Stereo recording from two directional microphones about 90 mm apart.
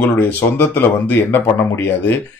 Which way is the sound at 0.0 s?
25° left (ahead or behind).